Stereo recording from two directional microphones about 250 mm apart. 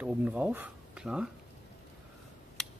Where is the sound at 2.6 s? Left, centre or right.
Centre.